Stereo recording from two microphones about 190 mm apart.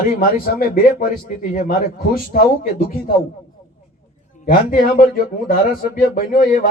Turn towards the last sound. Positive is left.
turn(degrees=45)  # may be behind; listen again after turning